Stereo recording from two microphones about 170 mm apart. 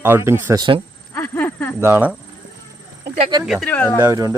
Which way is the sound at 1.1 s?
10° left (ahead or behind).